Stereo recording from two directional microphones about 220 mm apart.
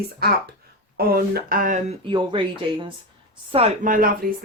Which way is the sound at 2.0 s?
20° right (ahead or behind).